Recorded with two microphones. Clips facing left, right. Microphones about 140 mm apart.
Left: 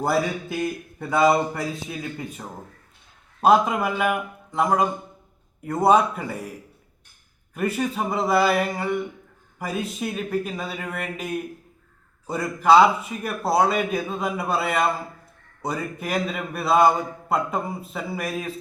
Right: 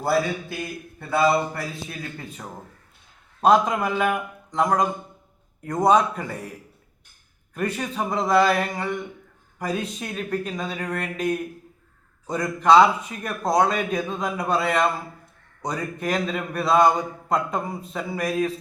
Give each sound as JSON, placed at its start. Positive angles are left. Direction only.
{"t": 0.9, "sound": "a man's voice", "side_deg": 15}
{"t": 7.5, "sound": "a man's voice", "side_deg": 5}